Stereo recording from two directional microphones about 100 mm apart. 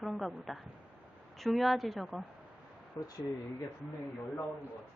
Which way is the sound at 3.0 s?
35° left (ahead or behind).